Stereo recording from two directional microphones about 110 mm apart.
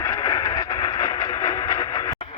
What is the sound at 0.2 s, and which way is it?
Vehicle, 40° left (ahead or behind).